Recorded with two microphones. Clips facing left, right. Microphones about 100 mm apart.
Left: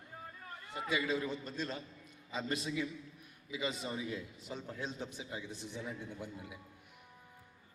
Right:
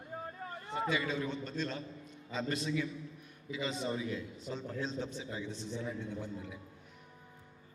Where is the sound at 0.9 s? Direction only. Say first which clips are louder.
Left 5 dB; 10° left (ahead or behind).